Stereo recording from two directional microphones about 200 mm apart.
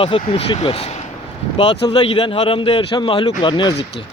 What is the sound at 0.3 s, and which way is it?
Speech, 25° left (ahead or behind).